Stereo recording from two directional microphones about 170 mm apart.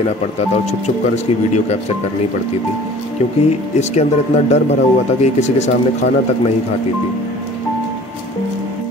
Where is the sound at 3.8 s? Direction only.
40° left (ahead or behind).